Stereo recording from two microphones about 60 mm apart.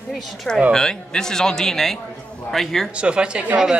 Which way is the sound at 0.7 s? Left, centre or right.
Centre.